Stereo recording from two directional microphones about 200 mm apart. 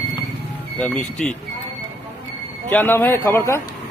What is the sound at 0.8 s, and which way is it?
Speech, 5° left (ahead or behind).